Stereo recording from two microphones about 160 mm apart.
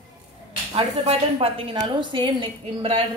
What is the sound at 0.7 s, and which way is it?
A woman's voice, 35° right (ahead or behind).